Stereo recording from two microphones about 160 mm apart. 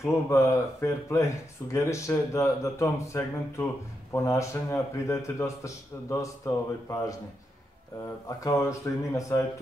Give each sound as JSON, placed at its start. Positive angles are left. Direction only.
{"t": 0.0, "sound": "a man's voice", "side_deg": 15}
{"t": 8.5, "sound": "a man's voice", "side_deg": 20}